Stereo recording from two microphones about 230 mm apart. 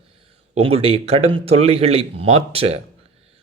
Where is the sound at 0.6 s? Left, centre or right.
Right.